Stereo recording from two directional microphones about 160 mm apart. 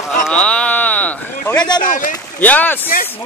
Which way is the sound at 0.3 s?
5° left (ahead or behind).